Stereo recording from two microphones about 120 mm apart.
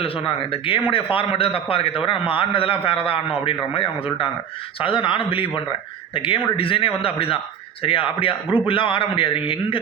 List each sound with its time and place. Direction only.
0.0 s a man's voice: 50° left (ahead or behind)